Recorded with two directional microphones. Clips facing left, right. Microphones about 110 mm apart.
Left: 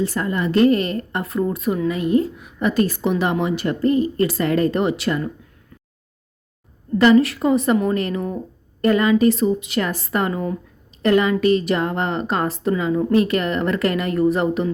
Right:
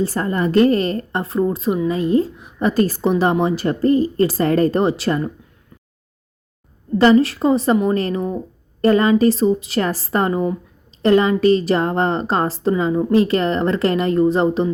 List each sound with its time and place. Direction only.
0.0 s a woman's voice: 40° right (ahead or behind)
7.0 s a woman's voice: 30° right (ahead or behind)